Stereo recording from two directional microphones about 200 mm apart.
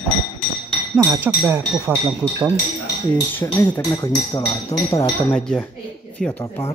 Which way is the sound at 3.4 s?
15° left (ahead or behind).